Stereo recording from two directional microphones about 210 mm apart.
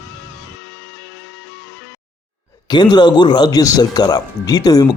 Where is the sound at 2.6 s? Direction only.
20° left (ahead or behind).